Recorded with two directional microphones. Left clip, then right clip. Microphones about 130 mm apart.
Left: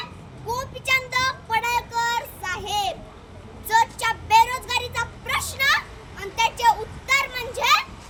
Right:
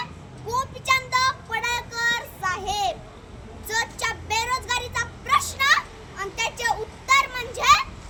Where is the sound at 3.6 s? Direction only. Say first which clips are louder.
Left 6 dB; 15° right (ahead or behind).